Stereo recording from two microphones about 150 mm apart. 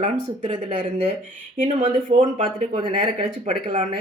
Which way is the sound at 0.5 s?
35° right (ahead or behind).